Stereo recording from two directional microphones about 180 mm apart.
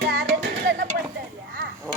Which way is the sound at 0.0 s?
70° right (ahead or behind).